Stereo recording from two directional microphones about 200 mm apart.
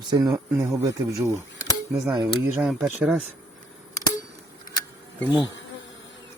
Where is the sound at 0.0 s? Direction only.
20° right (ahead or behind).